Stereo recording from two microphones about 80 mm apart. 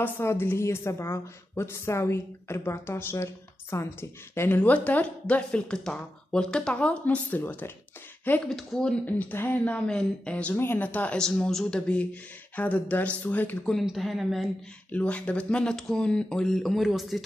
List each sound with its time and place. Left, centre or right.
0.0 s a woman's voice: left
4.6 s speech: centre
7.2 s speech: left
8.5 s speech: centre
9.0 s speech: left
9.8 s speech: centre
13.8 s speech: centre
14.9 s speech: centre